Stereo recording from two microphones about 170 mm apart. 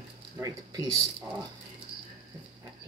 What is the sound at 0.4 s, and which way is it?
Speech, 20° right (ahead or behind).